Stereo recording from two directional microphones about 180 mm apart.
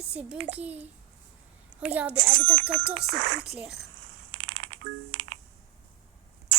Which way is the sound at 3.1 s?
80° right.